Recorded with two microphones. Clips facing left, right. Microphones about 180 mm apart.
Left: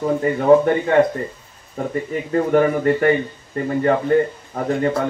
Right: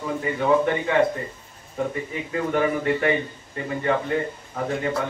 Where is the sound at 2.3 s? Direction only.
45° left (ahead or behind).